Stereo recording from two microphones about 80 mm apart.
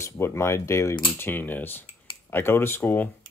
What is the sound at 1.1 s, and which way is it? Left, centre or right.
Speech, left.